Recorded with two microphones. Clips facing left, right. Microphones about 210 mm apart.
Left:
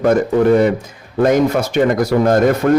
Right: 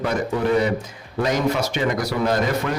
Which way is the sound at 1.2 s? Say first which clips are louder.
Left 8 dB; 50° left (ahead or behind).